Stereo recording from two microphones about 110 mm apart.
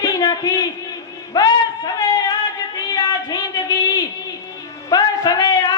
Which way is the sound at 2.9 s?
35° left (ahead or behind).